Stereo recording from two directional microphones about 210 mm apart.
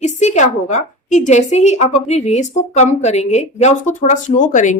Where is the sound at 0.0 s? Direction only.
35° left (ahead or behind).